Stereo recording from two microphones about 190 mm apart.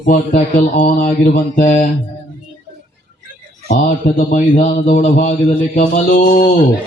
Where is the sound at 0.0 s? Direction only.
45° left (ahead or behind).